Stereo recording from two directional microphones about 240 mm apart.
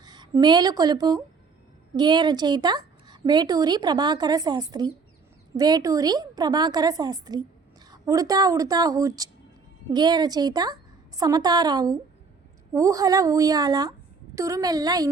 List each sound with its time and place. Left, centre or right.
0.0 s a woman's voice: centre